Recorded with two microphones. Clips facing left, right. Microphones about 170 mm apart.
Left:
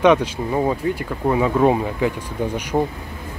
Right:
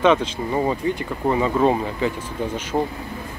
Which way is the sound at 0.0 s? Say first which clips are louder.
Left 2 dB; 15° left (ahead or behind).